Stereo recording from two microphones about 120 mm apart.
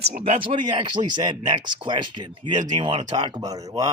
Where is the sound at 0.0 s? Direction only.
55° right (ahead or behind).